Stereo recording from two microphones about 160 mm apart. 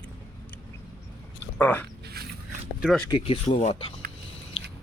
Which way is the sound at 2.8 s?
5° right (ahead or behind).